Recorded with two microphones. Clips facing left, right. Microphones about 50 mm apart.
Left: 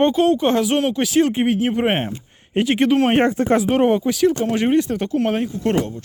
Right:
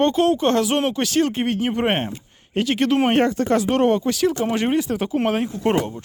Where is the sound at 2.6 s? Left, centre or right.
Left; by 5.1 s centre.